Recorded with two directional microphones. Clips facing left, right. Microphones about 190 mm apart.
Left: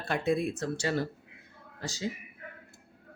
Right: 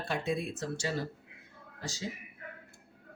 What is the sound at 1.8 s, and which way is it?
Speech, 65° left (ahead or behind).